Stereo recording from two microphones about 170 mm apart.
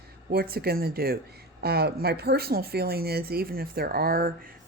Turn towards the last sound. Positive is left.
turn(degrees=-60)  # may be behind; listen again after turning